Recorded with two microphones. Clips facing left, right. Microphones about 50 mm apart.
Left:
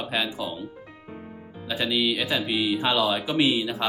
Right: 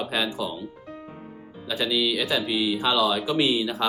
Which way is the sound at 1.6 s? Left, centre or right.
Centre.